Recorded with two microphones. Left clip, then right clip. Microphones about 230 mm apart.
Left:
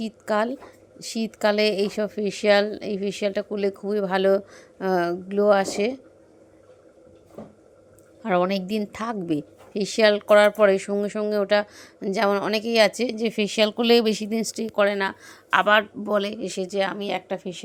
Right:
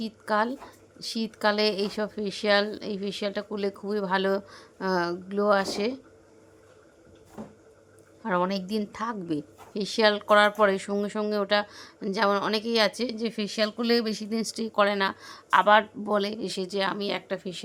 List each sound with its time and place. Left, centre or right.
0.0 s a woman's voice: centre
8.2 s a woman's voice: centre